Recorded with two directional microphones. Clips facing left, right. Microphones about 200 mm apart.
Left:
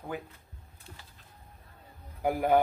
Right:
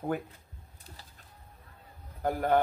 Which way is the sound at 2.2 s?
10° left (ahead or behind).